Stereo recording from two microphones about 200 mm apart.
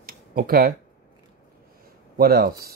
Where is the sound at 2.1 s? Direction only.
45° right (ahead or behind).